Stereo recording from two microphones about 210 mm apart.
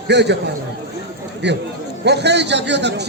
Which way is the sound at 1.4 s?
55° right (ahead or behind).